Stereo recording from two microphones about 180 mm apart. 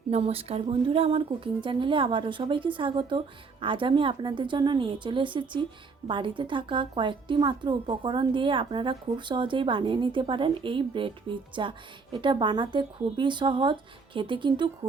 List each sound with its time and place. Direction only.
0.1 s a woman's voice: 35° right (ahead or behind)